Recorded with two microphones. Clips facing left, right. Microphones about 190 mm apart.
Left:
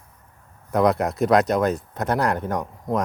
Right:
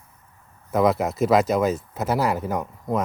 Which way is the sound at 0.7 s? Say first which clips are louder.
Left 1 dB; centre (ahead or behind).